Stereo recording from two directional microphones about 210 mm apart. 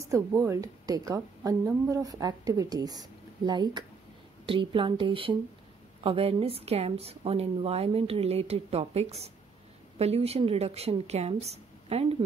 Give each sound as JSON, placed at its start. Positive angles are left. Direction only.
{"t": 0.0, "sound": "a woman's voice", "side_deg": -15}